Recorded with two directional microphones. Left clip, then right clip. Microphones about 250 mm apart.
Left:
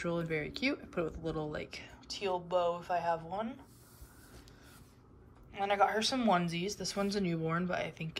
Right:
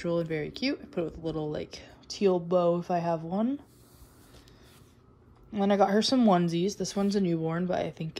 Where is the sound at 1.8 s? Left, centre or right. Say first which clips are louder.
Right 10 dB; right.